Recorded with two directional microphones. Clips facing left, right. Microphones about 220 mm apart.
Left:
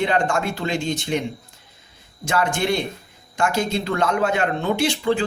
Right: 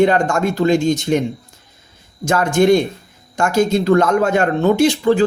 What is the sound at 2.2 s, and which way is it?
Speech, 45° right (ahead or behind).